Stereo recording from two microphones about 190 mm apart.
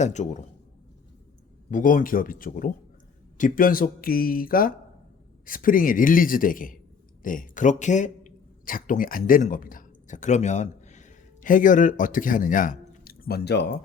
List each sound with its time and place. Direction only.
0.0 s speech: 35° left (ahead or behind)
1.7 s a man's voice: 45° left (ahead or behind); by 13.7 s 60° left (ahead or behind)